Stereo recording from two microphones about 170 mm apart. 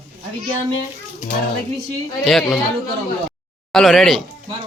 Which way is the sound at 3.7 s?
Centre (ahead or behind).